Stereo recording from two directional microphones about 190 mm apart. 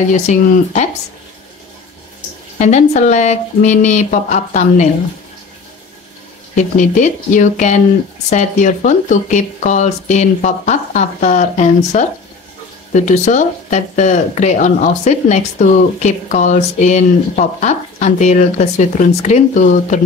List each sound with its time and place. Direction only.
0.1 s speech: 40° left (ahead or behind)
2.6 s speech: 35° left (ahead or behind)
6.5 s speech: 40° left (ahead or behind)